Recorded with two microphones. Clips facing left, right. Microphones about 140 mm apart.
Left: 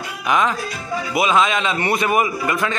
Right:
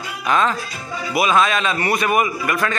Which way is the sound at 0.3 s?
15° left (ahead or behind).